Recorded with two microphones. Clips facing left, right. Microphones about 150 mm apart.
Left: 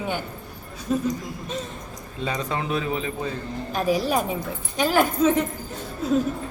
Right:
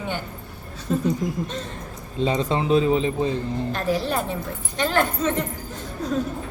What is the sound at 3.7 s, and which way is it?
A woman's voice, 10° left (ahead or behind).